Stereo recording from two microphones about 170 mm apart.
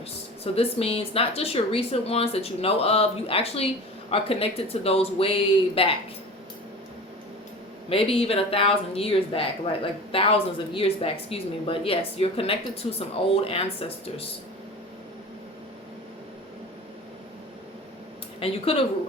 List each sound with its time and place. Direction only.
0.4 s speech: 35° left (ahead or behind)
7.9 s speech: 35° left (ahead or behind)
18.3 s speech: 35° left (ahead or behind)